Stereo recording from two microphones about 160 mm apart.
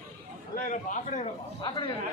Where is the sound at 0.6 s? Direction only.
50° left (ahead or behind).